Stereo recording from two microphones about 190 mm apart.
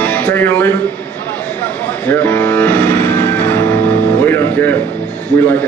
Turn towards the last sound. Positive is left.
turn(degrees=10)  # may be behind; listen again after turning